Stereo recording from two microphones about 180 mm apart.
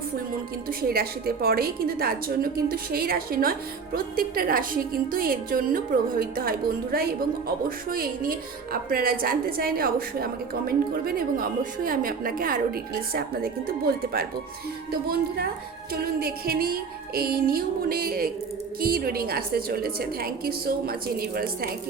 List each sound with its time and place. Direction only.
0.7 s a woman's voice: 55° right (ahead or behind)
15.9 s a woman's voice: 60° right (ahead or behind)